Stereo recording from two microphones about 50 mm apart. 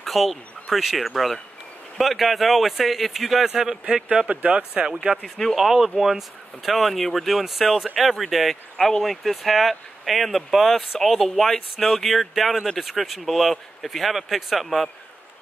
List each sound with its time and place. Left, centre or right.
0.0 s a man's voice: centre; by 4.9 s right
5.2 s speech: centre
5.6 s speech: centre
8.7 s speech: centre